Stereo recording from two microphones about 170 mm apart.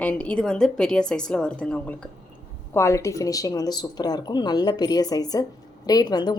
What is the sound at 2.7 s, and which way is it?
Speech, 15° left (ahead or behind).